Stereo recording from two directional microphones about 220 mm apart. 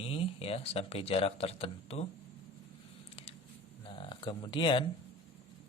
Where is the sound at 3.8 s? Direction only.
25° left (ahead or behind).